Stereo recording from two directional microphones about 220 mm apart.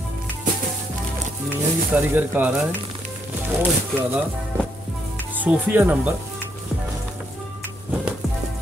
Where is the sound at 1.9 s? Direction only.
10° right (ahead or behind).